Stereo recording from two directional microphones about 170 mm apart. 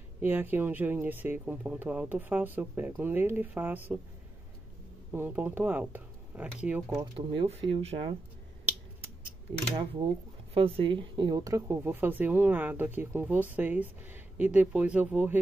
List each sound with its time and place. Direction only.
0.2 s speech: 10° right (ahead or behind)
5.1 s speech: 10° right (ahead or behind)
7.0 s speech: 30° right (ahead or behind)
10.5 s speech: 30° right (ahead or behind); by 15.4 s 10° right (ahead or behind)